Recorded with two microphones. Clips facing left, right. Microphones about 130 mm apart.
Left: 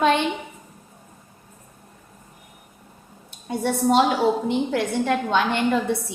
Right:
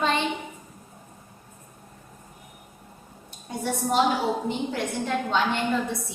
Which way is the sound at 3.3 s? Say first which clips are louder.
Left 5 dB; 70° left (ahead or behind).